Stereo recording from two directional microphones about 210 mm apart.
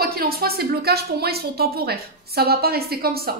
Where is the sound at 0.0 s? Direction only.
45° right (ahead or behind).